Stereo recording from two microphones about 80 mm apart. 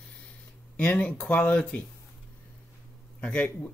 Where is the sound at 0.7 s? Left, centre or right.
Centre.